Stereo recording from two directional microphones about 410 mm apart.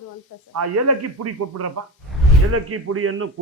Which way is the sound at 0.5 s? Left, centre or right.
Right.